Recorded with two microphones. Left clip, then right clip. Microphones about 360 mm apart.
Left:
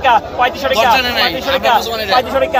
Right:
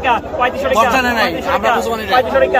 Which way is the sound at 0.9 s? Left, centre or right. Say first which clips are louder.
Left 1 dB; centre.